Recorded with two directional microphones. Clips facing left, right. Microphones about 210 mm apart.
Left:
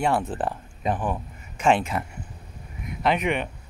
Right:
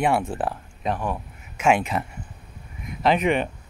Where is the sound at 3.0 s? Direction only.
35° right (ahead or behind).